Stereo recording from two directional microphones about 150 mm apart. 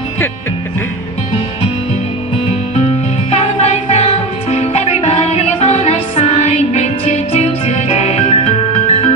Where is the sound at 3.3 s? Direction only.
45° left (ahead or behind).